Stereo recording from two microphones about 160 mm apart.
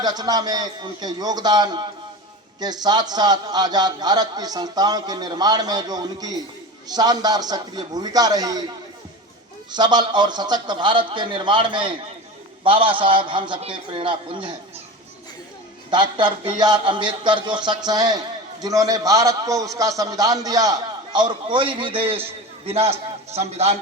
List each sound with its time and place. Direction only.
0.0 s a man's voice: 25° right (ahead or behind)
9.7 s a man's voice: 30° right (ahead or behind)
15.9 s a man's voice: 30° right (ahead or behind)